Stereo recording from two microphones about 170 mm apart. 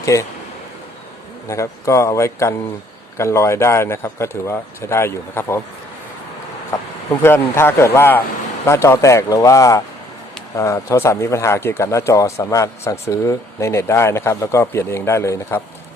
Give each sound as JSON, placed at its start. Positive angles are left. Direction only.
{"t": 0.0, "sound": "speech", "side_deg": 20}
{"t": 1.5, "sound": "speech", "side_deg": 15}
{"t": 6.7, "sound": "speech", "side_deg": 15}